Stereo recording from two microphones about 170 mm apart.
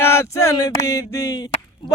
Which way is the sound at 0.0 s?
15° left (ahead or behind).